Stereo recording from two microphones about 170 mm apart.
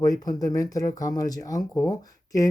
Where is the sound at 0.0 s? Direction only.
20° left (ahead or behind).